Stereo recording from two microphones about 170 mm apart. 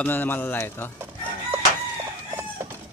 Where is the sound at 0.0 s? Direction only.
10° left (ahead or behind).